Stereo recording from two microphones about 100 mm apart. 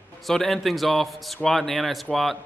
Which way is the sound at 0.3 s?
5° left (ahead or behind).